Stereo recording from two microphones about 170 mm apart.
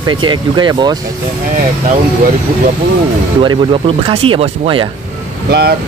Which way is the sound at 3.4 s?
30° right (ahead or behind).